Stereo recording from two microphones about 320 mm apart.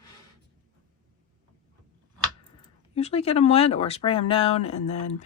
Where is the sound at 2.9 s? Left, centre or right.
Centre.